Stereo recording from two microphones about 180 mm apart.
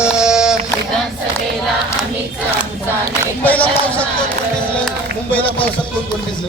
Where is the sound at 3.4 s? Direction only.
10° left (ahead or behind).